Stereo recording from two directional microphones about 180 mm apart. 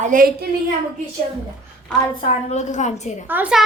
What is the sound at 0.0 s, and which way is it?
Speech, 50° right (ahead or behind).